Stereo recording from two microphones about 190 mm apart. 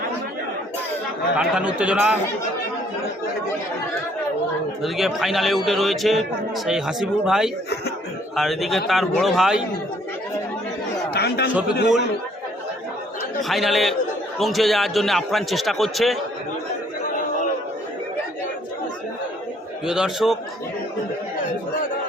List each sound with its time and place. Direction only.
1.4 s a man's voice: 5° right (ahead or behind)
4.8 s a man's voice: centre (ahead or behind)
11.1 s speech: 60° left (ahead or behind)
13.4 s a man's voice: centre (ahead or behind)
19.8 s a man's voice: 5° right (ahead or behind)